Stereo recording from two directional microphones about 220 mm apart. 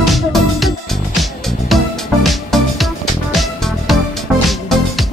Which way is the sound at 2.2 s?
Centre (ahead or behind).